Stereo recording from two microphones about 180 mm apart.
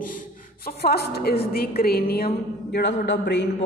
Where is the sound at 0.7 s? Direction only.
60° left (ahead or behind).